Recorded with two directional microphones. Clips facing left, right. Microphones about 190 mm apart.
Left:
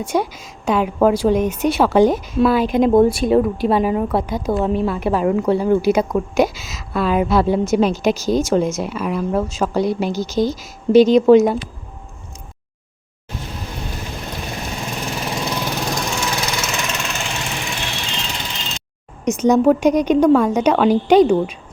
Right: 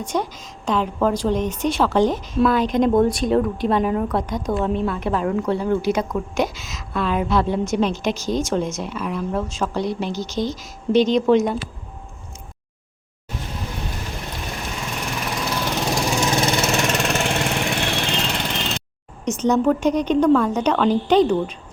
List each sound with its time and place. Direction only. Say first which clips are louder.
0.0 s a woman's voice: left 4 dB; 10° left (ahead or behind)
15.2 s lawn mower: left 1 dB; 20° left (ahead or behind)
16.0 s lawn mower: right 3 dB; 20° right (ahead or behind); by 18.8 s 60° right (ahead or behind)
19.2 s a woman's voice: left 4 dB; 10° left (ahead or behind)